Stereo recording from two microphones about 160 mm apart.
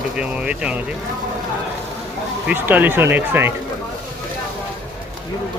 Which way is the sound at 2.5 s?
10° right (ahead or behind).